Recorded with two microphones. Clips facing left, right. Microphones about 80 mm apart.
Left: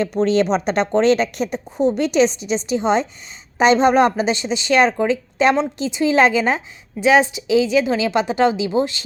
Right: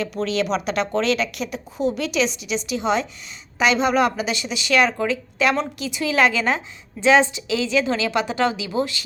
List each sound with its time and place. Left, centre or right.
0.2 s a woman's voice: left